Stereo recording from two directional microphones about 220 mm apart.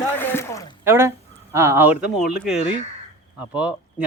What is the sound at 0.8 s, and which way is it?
Speech, 10° right (ahead or behind).